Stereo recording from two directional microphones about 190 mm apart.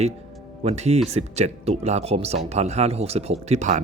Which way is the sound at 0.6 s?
35° right (ahead or behind).